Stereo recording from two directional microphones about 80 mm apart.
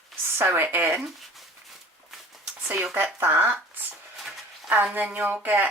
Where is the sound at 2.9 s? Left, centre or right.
Right.